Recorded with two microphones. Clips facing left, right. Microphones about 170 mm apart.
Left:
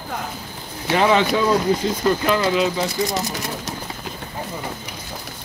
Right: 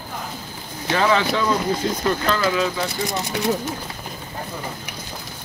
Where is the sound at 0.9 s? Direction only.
20° left (ahead or behind).